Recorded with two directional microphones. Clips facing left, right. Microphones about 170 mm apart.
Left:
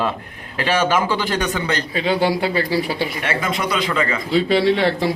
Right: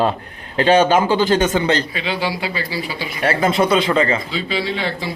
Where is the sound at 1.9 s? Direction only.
45° left (ahead or behind); by 3.1 s 60° left (ahead or behind).